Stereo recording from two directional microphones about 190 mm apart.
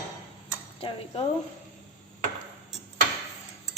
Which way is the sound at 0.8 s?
30° left (ahead or behind).